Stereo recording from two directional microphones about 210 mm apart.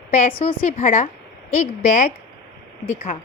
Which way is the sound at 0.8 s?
35° left (ahead or behind).